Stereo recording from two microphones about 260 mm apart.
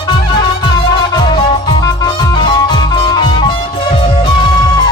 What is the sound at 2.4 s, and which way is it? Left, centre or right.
Music, centre.